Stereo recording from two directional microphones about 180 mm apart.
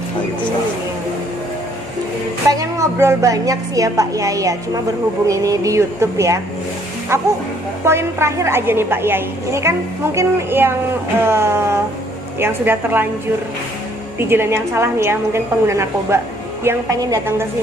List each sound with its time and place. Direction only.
2.5 s a woman's voice: 20° right (ahead or behind)
14.2 s a woman's voice: 15° right (ahead or behind)